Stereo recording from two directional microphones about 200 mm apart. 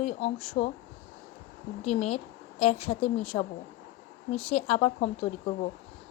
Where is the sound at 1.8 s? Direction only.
30° left (ahead or behind).